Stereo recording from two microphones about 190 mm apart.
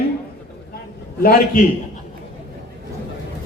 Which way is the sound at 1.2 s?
50° left (ahead or behind).